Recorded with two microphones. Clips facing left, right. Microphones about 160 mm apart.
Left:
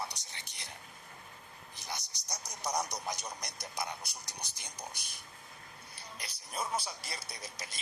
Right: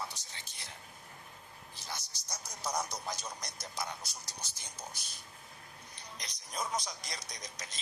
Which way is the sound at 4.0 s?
60° left (ahead or behind).